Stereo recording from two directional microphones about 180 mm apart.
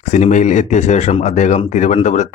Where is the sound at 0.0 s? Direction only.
40° left (ahead or behind).